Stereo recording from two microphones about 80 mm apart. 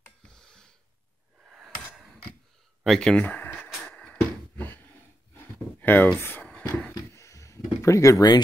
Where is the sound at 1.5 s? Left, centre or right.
Centre.